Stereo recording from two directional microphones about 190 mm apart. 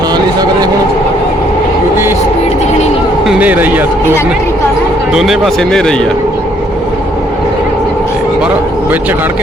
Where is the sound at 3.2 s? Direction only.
5° right (ahead or behind).